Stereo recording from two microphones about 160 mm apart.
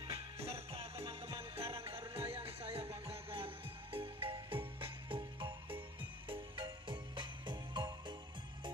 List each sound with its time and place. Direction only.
0.5 s music: 40° right (ahead or behind)